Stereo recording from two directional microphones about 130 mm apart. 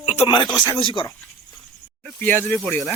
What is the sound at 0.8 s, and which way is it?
Speech, 40° left (ahead or behind).